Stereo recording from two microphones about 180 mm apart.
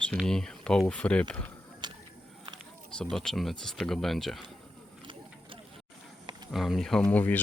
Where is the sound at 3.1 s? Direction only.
5° left (ahead or behind).